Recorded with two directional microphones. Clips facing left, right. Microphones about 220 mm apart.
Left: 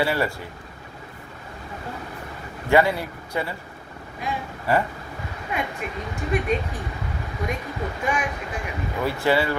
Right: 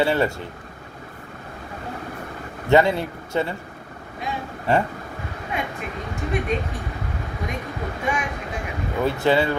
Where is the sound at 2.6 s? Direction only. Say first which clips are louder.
Right 2 dB; 25° right (ahead or behind).